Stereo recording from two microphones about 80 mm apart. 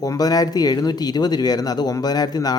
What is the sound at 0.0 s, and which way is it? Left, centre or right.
A man's voice, left.